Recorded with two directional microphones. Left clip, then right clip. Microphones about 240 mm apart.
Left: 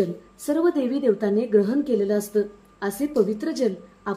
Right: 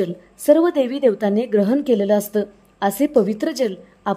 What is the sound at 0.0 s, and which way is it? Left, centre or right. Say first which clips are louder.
A woman's voice: right 6 dB; right.